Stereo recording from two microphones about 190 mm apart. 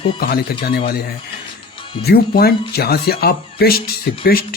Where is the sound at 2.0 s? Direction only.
55° left (ahead or behind).